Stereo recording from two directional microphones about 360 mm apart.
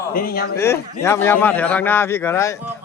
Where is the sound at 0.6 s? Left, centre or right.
Centre.